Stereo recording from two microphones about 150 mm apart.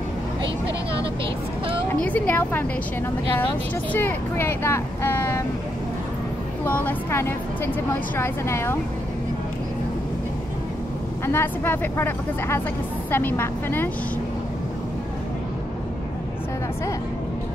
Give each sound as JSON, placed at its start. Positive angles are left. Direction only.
{"t": 1.9, "sound": "speech", "side_deg": 10}
{"t": 3.9, "sound": "speech", "side_deg": 15}
{"t": 6.6, "sound": "speech", "side_deg": 10}
{"t": 11.2, "sound": "speech", "side_deg": 15}